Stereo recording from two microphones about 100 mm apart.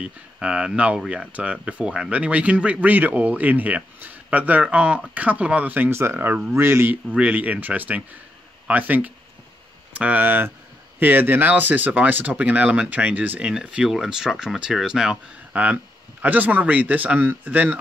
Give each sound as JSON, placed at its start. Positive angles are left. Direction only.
{"t": 0.0, "sound": "speech", "side_deg": -10}